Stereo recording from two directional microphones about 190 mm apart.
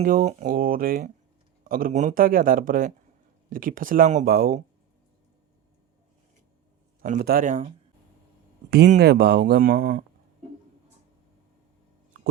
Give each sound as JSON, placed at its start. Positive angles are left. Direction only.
{"t": 0.0, "sound": "speech", "side_deg": -45}
{"t": 7.0, "sound": "speech", "side_deg": -45}
{"t": 9.0, "sound": "speech", "side_deg": -55}